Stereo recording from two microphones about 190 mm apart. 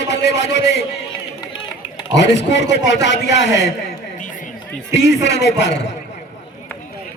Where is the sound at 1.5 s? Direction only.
25° left (ahead or behind).